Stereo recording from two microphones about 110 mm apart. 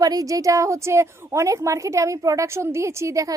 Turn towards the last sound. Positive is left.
turn(degrees=-30)  # may be behind; listen again after turning